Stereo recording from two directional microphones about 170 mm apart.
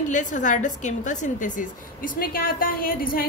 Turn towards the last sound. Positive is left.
turn(degrees=55)  # may be behind; listen again after turning